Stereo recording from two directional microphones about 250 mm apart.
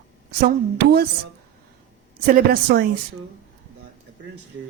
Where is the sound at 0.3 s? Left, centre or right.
Right.